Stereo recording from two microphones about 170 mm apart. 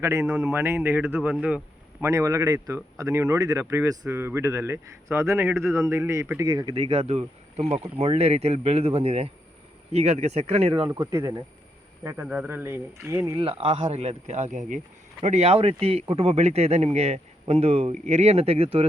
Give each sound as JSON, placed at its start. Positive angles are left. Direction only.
{"t": 0.0, "sound": "speech", "side_deg": -20}
{"t": 0.3, "sound": "speech", "side_deg": -5}
{"t": 2.0, "sound": "speech", "side_deg": -20}
{"t": 10.9, "sound": "speech", "side_deg": -15}
{"t": 13.4, "sound": "speech", "side_deg": -35}